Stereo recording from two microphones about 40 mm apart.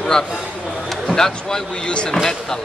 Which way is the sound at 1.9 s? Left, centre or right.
Left.